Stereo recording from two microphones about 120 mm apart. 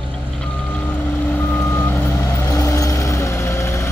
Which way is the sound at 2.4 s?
30° left (ahead or behind).